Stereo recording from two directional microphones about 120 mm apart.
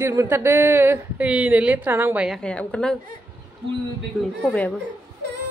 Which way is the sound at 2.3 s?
5° left (ahead or behind).